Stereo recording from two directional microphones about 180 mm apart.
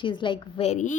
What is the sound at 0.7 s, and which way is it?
Speech, 40° left (ahead or behind).